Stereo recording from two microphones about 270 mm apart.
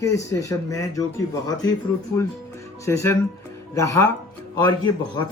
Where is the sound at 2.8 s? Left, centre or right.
Centre.